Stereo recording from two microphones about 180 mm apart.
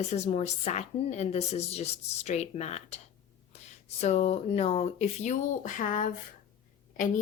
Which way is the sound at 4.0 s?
35° left (ahead or behind).